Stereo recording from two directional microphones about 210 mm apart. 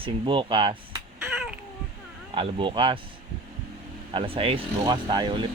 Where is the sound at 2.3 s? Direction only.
25° right (ahead or behind).